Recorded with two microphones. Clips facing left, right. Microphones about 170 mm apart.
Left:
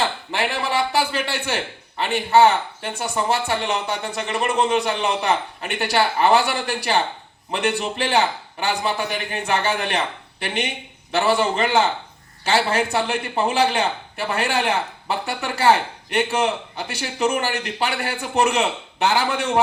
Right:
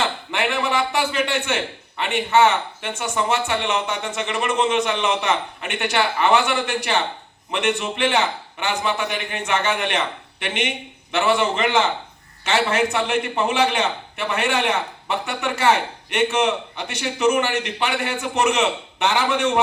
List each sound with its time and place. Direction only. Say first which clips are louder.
0.0 s a man's voice: even; 35° left (ahead or behind)